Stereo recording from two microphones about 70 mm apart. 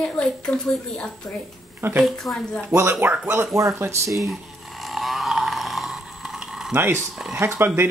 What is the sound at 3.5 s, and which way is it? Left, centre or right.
Speech, right.